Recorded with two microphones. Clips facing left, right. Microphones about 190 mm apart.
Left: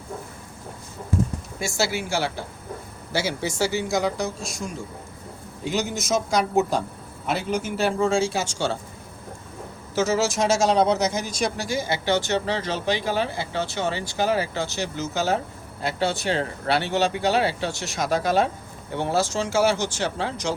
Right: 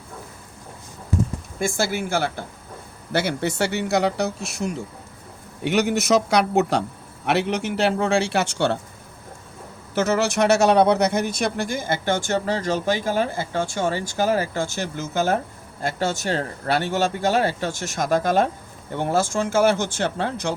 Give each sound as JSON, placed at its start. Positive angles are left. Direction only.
{"t": 1.5, "sound": "a man's voice", "side_deg": -50}
{"t": 9.9, "sound": "a man's voice", "side_deg": -60}